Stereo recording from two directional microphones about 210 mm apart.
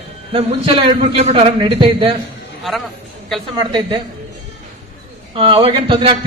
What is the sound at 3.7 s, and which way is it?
Speech, 20° right (ahead or behind).